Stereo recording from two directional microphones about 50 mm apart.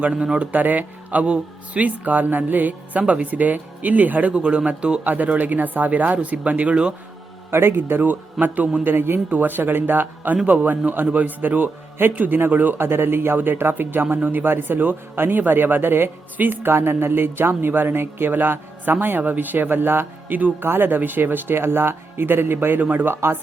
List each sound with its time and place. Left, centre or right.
0.1 s speech: centre
0.5 s speech: right
5.0 s speech: right
7.5 s a man's voice: right
23.1 s speech: right